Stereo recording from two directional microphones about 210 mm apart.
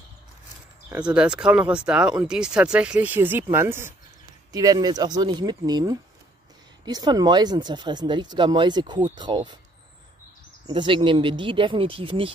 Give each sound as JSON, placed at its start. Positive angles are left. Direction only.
{"t": 0.8, "sound": "speech", "side_deg": -5}
{"t": 10.7, "sound": "speech", "side_deg": -25}